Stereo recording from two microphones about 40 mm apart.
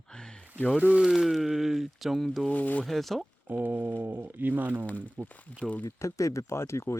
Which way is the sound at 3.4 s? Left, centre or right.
Right.